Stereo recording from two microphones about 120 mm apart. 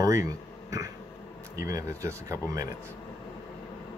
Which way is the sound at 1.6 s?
25° right (ahead or behind).